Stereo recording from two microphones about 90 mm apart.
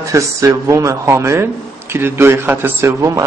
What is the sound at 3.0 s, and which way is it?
Speech, 35° right (ahead or behind).